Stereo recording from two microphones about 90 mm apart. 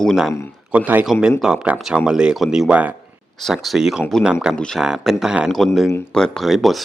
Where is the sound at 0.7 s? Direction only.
15° right (ahead or behind).